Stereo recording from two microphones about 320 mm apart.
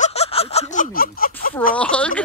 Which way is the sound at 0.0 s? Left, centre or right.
Centre.